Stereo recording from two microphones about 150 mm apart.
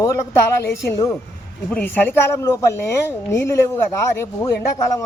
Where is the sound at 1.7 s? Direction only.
10° left (ahead or behind).